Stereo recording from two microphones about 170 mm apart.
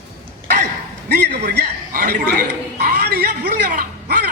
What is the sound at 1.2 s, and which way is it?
Speech, 75° right (ahead or behind).